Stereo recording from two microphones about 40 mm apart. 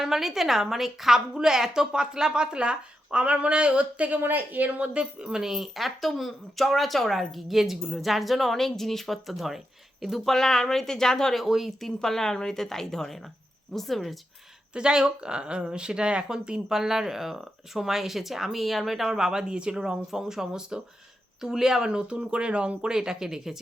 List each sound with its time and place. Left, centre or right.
0.0 s speech: centre; by 4.2 s right
4.2 s a woman's voice: right
4.9 s speech: centre
5.7 s a woman's voice: centre
10.3 s a woman's voice: centre
11.4 s speech: centre
11.9 s a woman's voice: centre
14.7 s speech: centre
19.2 s speech: centre